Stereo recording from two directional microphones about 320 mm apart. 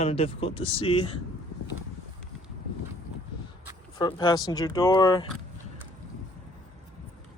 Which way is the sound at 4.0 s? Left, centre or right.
Centre.